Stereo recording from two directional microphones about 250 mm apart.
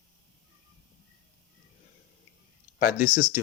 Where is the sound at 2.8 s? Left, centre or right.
Left.